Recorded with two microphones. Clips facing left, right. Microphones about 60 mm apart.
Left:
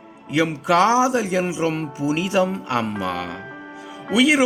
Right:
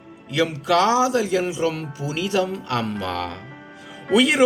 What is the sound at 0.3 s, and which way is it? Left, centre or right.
Speech, left.